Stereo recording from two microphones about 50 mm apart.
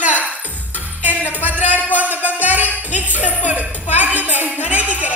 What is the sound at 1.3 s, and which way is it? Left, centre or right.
Music, right.